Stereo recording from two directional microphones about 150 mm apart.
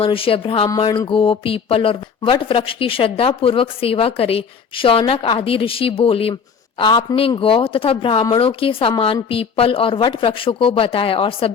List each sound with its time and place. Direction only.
0.0 s speech: 40° left (ahead or behind)
6.7 s speech: 30° left (ahead or behind)